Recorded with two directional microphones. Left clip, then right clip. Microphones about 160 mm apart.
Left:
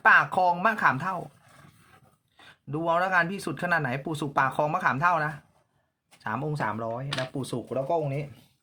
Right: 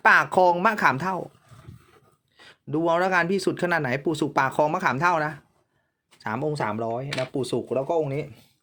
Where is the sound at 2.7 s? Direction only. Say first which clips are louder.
Right 2 dB; 35° right (ahead or behind).